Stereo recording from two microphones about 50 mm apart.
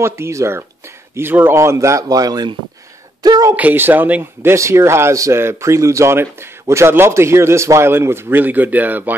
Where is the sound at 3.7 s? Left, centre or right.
Right.